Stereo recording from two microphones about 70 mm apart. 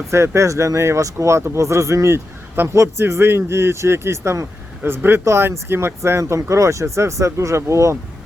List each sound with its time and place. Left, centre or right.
0.1 s speech: right
4.8 s speech: right